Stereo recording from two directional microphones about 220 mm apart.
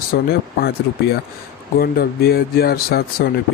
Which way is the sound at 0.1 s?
45° left (ahead or behind).